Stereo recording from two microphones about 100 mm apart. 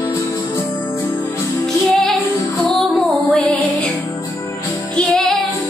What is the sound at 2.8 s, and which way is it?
Music, 5° left (ahead or behind).